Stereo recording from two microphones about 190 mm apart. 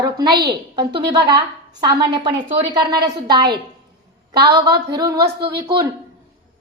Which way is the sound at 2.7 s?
20° right (ahead or behind).